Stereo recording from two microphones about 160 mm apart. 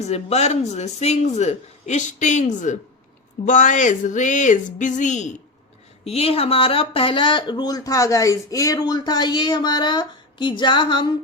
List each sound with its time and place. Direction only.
0.0 s speech: 40° left (ahead or behind)